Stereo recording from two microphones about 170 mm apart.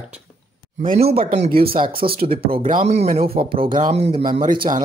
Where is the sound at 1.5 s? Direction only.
60° right (ahead or behind).